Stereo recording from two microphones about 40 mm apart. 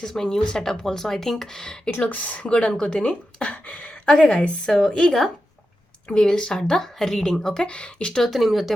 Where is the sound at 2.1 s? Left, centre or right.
Left.